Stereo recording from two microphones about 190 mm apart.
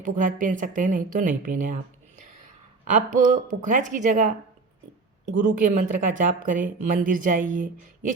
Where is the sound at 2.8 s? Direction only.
40° right (ahead or behind).